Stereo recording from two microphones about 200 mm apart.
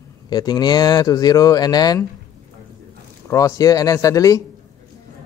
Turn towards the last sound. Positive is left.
turn(degrees=15)  # may be behind; listen again after turning